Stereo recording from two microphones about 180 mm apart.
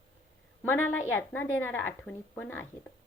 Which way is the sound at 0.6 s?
15° left (ahead or behind).